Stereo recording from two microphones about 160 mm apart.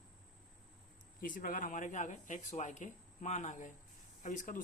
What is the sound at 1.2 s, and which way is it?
A man's voice, 60° left (ahead or behind).